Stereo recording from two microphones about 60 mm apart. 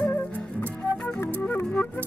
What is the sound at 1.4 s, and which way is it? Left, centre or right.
Music, left.